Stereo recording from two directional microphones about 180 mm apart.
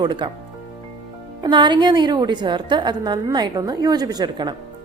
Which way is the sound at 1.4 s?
25° right (ahead or behind).